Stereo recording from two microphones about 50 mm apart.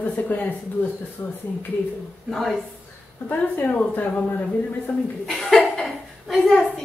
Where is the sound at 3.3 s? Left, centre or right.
Left.